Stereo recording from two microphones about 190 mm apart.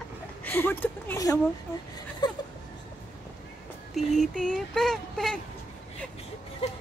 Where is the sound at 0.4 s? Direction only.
10° left (ahead or behind).